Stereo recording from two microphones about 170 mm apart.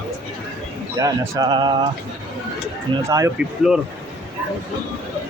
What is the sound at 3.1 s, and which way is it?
Speech, 20° right (ahead or behind).